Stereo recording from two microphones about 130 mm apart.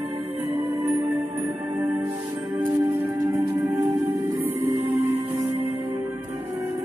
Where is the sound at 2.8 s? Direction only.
20° right (ahead or behind).